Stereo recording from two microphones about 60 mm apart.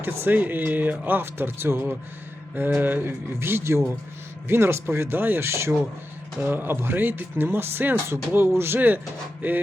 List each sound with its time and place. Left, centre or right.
0.0 s speech: right
0.3 s speech: right
1.2 s speech: right
6.4 s speech: right